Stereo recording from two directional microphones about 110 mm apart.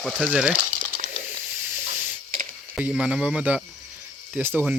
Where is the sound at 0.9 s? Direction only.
60° right (ahead or behind).